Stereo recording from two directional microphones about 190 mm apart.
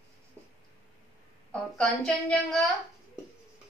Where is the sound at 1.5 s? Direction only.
5° left (ahead or behind).